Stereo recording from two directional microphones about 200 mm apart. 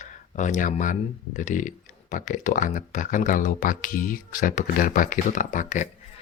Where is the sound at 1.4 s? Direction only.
40° left (ahead or behind).